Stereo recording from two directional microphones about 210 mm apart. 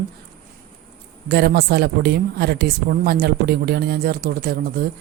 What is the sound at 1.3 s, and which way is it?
Speech, 50° right (ahead or behind).